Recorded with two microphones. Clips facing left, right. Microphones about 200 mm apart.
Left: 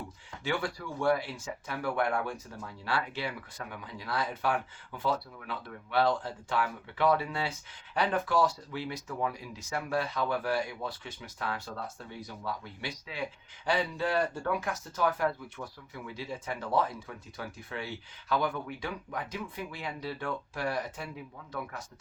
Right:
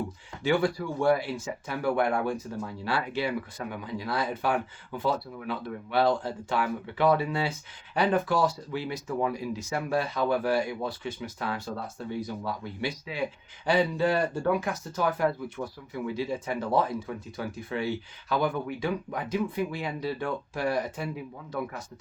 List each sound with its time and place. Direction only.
1.0 s speech: 10° right (ahead or behind)
9.0 s speech: 20° right (ahead or behind)
9.6 s speech: 10° right (ahead or behind)